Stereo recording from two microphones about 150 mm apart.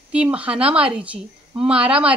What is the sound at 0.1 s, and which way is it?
A woman's voice, 10° right (ahead or behind).